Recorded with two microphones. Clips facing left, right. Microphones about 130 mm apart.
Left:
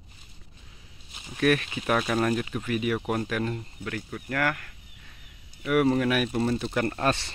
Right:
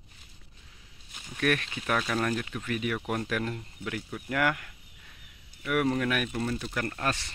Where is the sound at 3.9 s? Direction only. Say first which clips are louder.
Left 1 dB; 10° right (ahead or behind).